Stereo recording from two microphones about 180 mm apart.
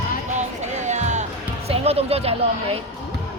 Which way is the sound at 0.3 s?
40° right (ahead or behind).